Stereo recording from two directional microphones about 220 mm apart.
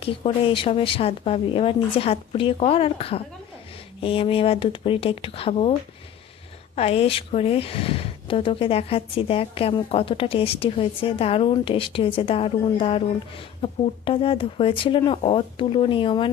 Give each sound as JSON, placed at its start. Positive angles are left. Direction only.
{"t": 0.0, "sound": "speech", "side_deg": 25}
{"t": 6.7, "sound": "speech", "side_deg": 25}